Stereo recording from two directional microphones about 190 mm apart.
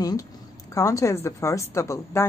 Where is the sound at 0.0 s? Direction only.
20° left (ahead or behind).